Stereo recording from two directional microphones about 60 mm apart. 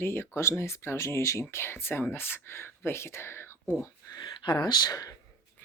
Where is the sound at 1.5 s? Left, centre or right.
Left.